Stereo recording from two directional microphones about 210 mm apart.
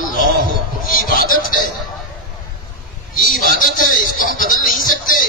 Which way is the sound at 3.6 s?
40° left (ahead or behind).